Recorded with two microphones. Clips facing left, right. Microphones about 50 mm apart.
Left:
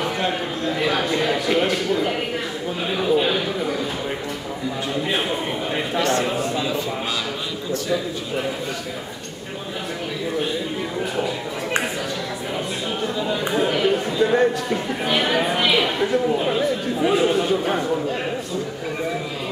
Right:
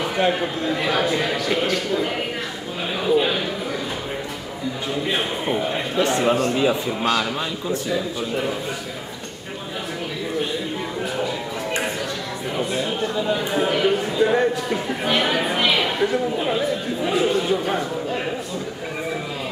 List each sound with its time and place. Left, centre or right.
0.3 s speech: centre
5.1 s speech: centre
6.0 s a man's voice: centre
12.5 s a sound: centre
13.4 s speech: centre